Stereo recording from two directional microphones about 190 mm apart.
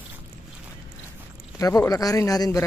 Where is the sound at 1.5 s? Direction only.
15° left (ahead or behind).